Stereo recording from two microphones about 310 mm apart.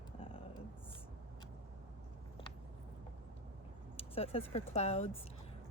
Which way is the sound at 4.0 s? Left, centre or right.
Centre.